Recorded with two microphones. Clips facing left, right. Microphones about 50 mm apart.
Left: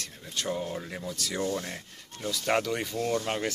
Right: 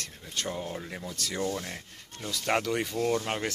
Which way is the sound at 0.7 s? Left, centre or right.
Centre.